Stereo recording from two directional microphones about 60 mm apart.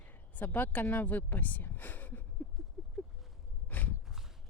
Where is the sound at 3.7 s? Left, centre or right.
Left.